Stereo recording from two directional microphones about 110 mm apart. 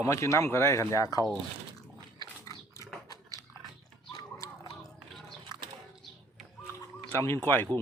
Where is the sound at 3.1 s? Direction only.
30° left (ahead or behind).